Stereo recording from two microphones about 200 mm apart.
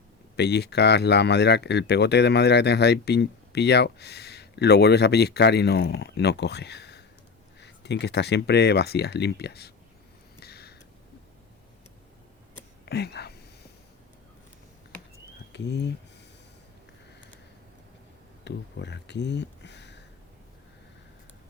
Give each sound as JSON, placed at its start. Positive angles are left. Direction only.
{"t": 0.3, "sound": "speech", "side_deg": 55}
{"t": 10.4, "sound": "a sound", "side_deg": 55}
{"t": 12.8, "sound": "whispering", "side_deg": 55}
{"t": 15.5, "sound": "speech", "side_deg": 60}
{"t": 18.4, "sound": "speech", "side_deg": 60}